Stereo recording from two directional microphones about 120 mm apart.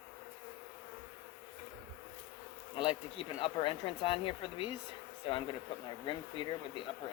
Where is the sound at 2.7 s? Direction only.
45° left (ahead or behind).